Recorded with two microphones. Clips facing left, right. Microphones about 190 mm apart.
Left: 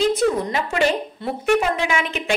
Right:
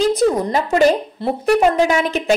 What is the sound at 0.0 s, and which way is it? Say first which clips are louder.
A woman's voice: right 3 dB; 40° right (ahead or behind).